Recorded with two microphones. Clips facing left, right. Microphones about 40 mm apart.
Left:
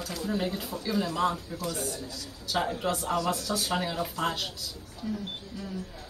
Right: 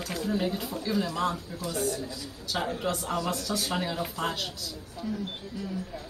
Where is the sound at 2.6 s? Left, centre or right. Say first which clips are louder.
Left 1 dB; centre.